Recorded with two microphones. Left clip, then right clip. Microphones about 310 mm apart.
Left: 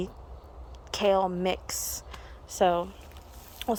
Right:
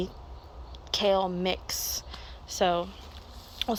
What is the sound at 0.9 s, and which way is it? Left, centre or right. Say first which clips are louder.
A woman's voice: left 1 dB; centre.